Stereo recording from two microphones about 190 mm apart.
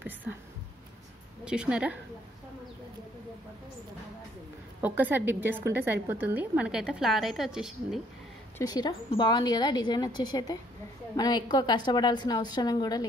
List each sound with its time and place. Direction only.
1.4 s a woman's voice: 5° right (ahead or behind)
4.8 s a woman's voice: 10° right (ahead or behind)
8.5 s a woman's voice: 20° left (ahead or behind)